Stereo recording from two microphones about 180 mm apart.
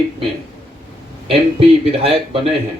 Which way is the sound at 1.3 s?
30° right (ahead or behind).